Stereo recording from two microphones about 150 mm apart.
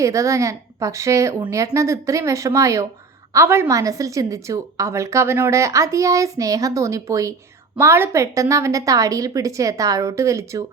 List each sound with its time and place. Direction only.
0.0 s a woman's voice: 20° right (ahead or behind)